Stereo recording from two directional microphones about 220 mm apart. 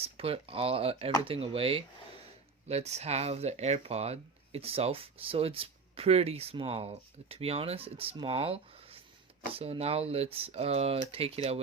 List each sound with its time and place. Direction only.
0.0 s speech: 25° right (ahead or behind)